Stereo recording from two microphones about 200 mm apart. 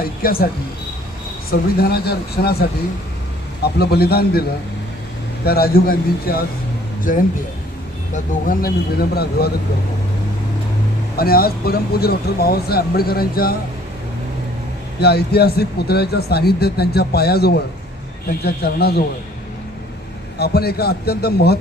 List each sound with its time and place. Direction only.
0.2 s speech: 45° left (ahead or behind)
1.5 s speech: 50° left (ahead or behind)
5.5 s speech: 50° left (ahead or behind)
11.2 s speech: 50° left (ahead or behind)
15.0 s speech: 55° left (ahead or behind)
20.4 s speech: 50° left (ahead or behind)